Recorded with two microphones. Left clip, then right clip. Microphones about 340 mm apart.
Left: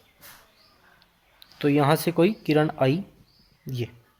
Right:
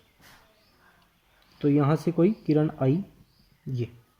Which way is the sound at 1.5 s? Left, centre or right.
Left.